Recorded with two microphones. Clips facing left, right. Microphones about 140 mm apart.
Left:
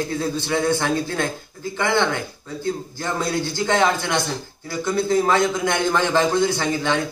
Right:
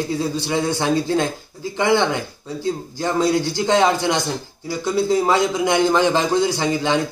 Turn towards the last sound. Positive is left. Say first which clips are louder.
# right 2 dB
turn(degrees=-15)  # may be behind; listen again after turning